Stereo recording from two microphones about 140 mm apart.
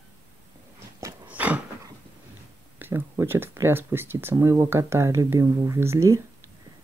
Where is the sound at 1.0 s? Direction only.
10° right (ahead or behind).